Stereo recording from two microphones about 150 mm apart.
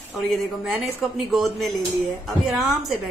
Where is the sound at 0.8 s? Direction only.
Centre (ahead or behind).